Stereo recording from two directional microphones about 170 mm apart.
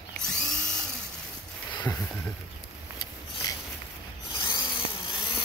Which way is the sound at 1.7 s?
20° left (ahead or behind).